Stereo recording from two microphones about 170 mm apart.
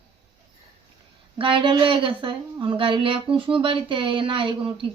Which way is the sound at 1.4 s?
30° right (ahead or behind).